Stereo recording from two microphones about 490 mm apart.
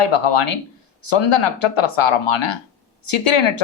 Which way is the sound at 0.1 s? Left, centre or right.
Left.